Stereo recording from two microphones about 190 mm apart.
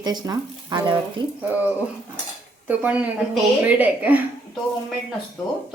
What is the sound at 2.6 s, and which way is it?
A woman's voice, 10° right (ahead or behind).